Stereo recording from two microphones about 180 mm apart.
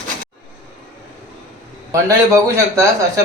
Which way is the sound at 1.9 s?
15° right (ahead or behind).